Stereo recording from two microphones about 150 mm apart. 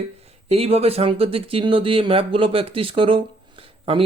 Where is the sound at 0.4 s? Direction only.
40° right (ahead or behind).